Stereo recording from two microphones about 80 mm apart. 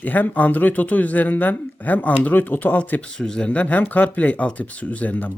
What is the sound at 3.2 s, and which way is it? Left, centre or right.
Speech, centre.